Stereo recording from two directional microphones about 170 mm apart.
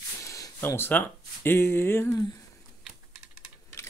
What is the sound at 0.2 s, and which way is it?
Speech, 15° left (ahead or behind).